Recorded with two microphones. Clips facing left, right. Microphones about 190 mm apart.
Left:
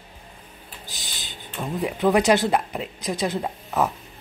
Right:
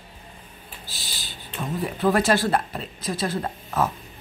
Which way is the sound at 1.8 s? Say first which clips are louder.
Left 2 dB; 20° left (ahead or behind).